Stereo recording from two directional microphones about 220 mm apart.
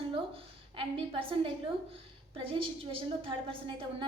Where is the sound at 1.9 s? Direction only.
25° right (ahead or behind).